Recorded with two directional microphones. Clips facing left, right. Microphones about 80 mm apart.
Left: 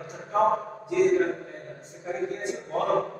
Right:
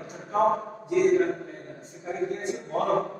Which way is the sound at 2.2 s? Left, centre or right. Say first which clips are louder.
Right 2 dB; right.